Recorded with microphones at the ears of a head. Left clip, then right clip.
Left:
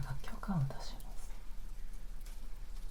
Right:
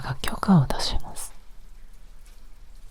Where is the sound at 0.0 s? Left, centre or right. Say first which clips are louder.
Right 18 dB; right.